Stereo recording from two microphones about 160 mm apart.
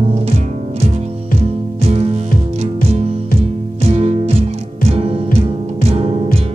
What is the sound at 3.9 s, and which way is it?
Music, 40° right (ahead or behind).